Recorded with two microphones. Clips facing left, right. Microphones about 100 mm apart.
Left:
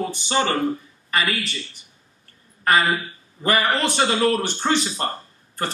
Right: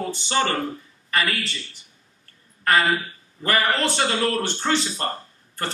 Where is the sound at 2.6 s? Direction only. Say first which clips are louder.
Left 1 dB; 15° left (ahead or behind).